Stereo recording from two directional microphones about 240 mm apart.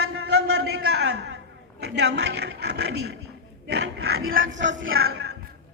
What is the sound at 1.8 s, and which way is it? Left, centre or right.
A woman's voice, right.